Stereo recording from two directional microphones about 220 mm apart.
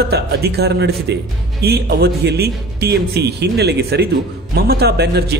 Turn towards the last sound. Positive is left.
turn(degrees=-45)  # may be behind; listen again after turning